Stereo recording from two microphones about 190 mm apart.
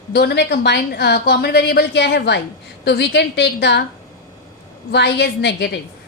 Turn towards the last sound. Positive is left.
turn(degrees=65)  # may be behind; listen again after turning